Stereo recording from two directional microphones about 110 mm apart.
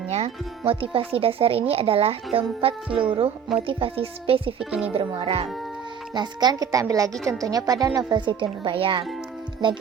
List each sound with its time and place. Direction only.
0.1 s speech: 65° right (ahead or behind)
4.6 s speech: 10° right (ahead or behind)
4.9 s speech: 60° right (ahead or behind)
6.1 s speech: 40° right (ahead or behind)
8.2 s speech: 45° right (ahead or behind)